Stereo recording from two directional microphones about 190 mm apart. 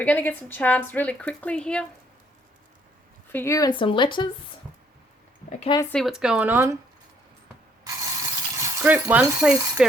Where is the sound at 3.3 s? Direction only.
15° left (ahead or behind).